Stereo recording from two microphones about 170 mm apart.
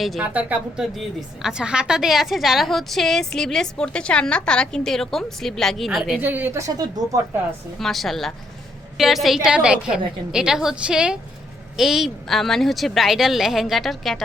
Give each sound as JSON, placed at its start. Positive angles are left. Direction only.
{"t": 0.0, "sound": "a woman's voice", "side_deg": 0}
{"t": 6.2, "sound": "a woman's voice", "side_deg": -10}
{"t": 7.8, "sound": "a woman's voice", "side_deg": 0}